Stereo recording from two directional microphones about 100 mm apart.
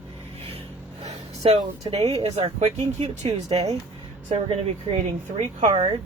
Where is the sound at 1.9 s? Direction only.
90° right.